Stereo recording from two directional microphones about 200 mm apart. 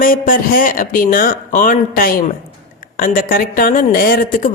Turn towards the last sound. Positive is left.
turn(degrees=45)  # may be behind; listen again after turning